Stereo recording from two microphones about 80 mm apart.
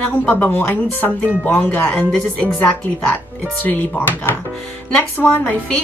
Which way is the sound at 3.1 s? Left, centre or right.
Left.